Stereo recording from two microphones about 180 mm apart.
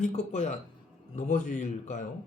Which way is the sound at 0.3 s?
40° left (ahead or behind).